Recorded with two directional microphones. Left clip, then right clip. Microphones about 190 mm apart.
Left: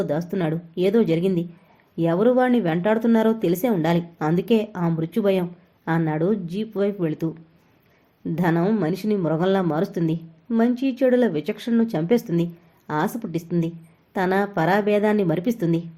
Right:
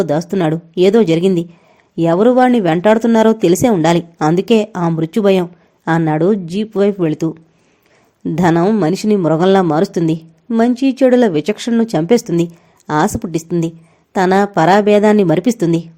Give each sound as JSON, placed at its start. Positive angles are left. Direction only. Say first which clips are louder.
{"t": 0.0, "sound": "speech", "louder": "right 9 dB", "side_deg": -50}